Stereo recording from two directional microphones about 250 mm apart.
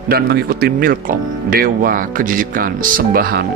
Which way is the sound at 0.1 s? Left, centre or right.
Right.